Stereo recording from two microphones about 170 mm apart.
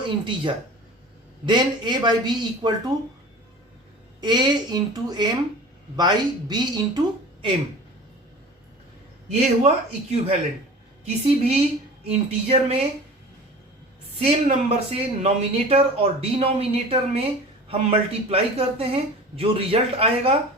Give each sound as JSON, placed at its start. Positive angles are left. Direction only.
{"t": 1.5, "sound": "speech", "side_deg": -25}
{"t": 4.2, "sound": "speech", "side_deg": -25}
{"t": 9.3, "sound": "speech", "side_deg": -40}
{"t": 14.2, "sound": "speech", "side_deg": -35}